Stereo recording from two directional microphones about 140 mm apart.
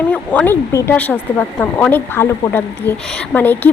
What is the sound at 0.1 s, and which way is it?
A woman's voice, 10° left (ahead or behind).